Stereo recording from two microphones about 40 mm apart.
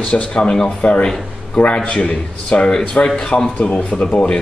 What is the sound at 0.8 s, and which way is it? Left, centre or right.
Speech, left.